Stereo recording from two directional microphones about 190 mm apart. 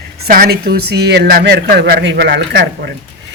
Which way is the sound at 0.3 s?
50° right (ahead or behind).